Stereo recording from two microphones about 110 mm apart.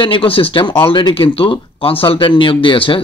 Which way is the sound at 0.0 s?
55° left (ahead or behind).